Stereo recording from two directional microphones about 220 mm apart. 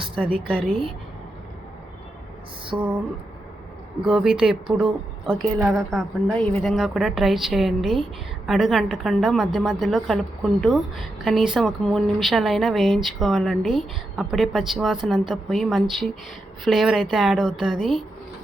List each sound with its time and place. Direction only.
0.2 s a woman's voice: 5° right (ahead or behind)
2.7 s a sound: 10° right (ahead or behind)
4.0 s a woman's voice: centre (ahead or behind)